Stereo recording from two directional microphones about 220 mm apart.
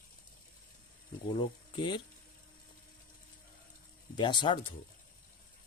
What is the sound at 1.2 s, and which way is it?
Speech, 20° left (ahead or behind).